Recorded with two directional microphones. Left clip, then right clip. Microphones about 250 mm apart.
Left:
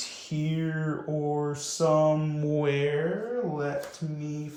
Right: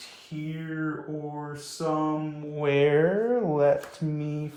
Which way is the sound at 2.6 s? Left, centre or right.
Centre.